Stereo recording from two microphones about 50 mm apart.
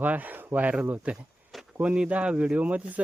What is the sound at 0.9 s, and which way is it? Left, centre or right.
Speech, right.